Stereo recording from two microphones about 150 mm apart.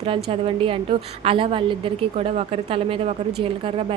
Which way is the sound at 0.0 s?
40° right (ahead or behind).